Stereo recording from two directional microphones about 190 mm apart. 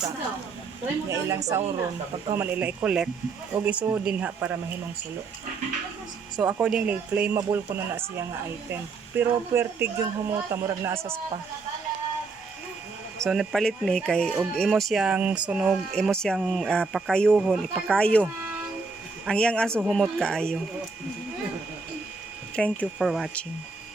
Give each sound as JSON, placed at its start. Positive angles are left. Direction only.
{"t": 1.1, "sound": "speech", "side_deg": -15}
{"t": 6.4, "sound": "speech", "side_deg": -5}
{"t": 13.2, "sound": "speech", "side_deg": 0}
{"t": 22.5, "sound": "speech", "side_deg": 5}